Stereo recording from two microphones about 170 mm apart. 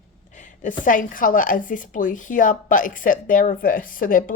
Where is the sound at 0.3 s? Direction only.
50° left (ahead or behind).